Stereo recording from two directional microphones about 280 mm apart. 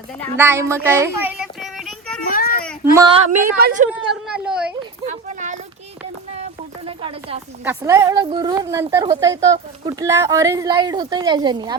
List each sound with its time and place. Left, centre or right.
0.3 s child singing: centre
2.3 s children playing: left
2.9 s a woman's voice: centre
3.3 s a woman's voice: right
4.1 s speech: centre
5.0 s children playing: right
6.8 s speech: centre
7.6 s a woman's voice: centre